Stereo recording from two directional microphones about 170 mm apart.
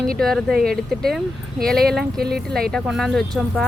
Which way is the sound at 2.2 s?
65° right (ahead or behind).